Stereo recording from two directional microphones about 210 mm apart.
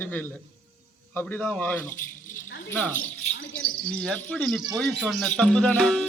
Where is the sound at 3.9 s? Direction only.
5° left (ahead or behind).